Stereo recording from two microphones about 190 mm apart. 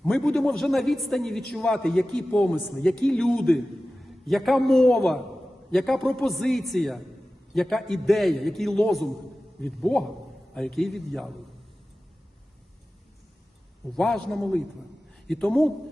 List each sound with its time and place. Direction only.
0.0 s a man's voice: centre (ahead or behind)
13.9 s a man's voice: centre (ahead or behind)